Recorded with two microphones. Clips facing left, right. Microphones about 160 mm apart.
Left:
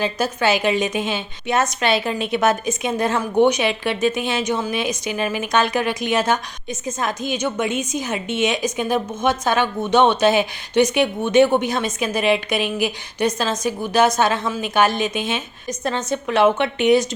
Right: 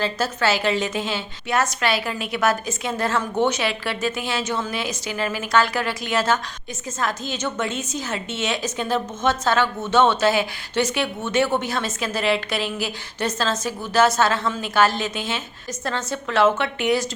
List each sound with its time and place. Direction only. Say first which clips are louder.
0.0 s a woman's voice: left 2 dB; 15° left (ahead or behind)